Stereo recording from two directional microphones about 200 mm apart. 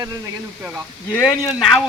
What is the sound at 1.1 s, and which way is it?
Speech, 5° left (ahead or behind).